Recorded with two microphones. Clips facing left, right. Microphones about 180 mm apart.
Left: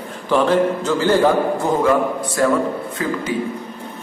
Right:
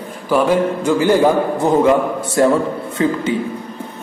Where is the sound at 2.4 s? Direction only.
25° right (ahead or behind).